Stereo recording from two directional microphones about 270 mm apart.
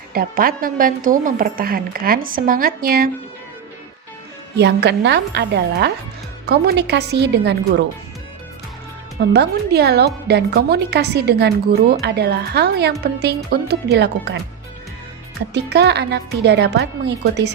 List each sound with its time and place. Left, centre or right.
0.1 s a woman's voice: right
4.5 s a woman's voice: right
9.3 s a woman's voice: right
15.5 s a woman's voice: right